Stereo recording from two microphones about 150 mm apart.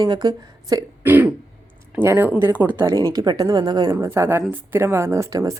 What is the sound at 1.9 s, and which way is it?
Speech, 15° right (ahead or behind).